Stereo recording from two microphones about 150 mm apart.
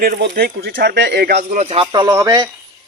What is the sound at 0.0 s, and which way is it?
Speech, 85° right.